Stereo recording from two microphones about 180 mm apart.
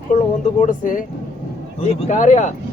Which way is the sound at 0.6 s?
45° left (ahead or behind).